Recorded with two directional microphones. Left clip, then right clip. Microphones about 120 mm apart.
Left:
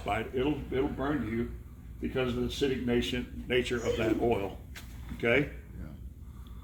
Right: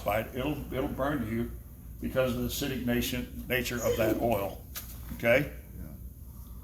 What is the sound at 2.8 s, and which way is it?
Speech, 40° right (ahead or behind).